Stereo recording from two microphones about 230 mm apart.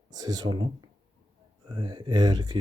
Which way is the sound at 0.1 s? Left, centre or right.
Centre.